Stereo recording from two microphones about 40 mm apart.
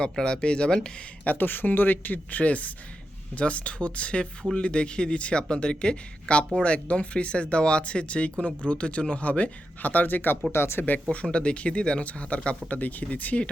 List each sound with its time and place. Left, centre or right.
0.0 s speech: left
1.2 s speech: left
10.5 s speech: left
11.1 s speech: left
12.6 s speech: left